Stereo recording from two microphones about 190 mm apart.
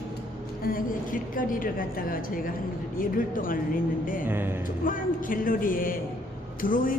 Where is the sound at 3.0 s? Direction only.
45° left (ahead or behind).